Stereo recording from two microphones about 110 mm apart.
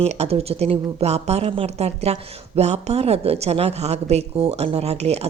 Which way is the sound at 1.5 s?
65° right (ahead or behind).